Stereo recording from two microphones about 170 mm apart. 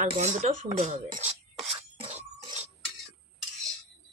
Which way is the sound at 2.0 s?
40° right (ahead or behind).